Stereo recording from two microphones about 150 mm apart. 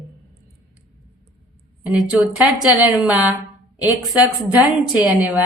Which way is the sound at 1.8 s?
10° right (ahead or behind).